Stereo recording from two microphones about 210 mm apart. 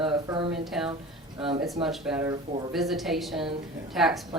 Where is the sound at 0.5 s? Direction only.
Centre (ahead or behind).